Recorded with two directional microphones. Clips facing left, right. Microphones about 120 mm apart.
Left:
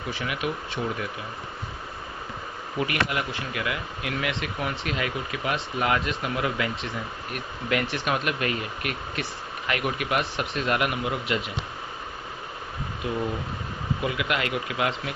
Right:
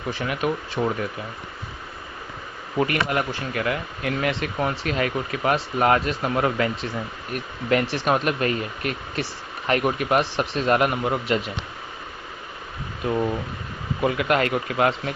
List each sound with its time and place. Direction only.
0.1 s speech: 40° right (ahead or behind)
2.7 s speech: 45° right (ahead or behind)
14.0 s speech: 45° right (ahead or behind)